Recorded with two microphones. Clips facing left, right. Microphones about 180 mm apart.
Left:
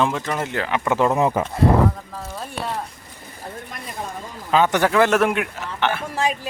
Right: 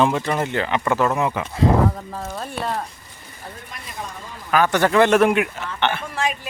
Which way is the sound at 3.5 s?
50° left (ahead or behind).